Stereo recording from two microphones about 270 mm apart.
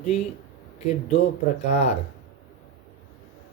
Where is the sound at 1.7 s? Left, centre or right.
Left.